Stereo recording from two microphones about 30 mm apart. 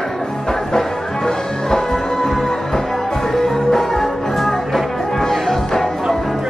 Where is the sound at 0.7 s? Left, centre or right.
Centre.